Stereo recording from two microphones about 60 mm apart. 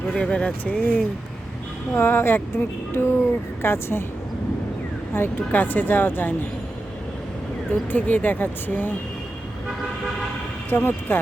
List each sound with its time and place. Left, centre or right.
0.1 s speech: centre
2.0 s speech: left
5.1 s speech: left
7.7 s speech: left
10.7 s speech: left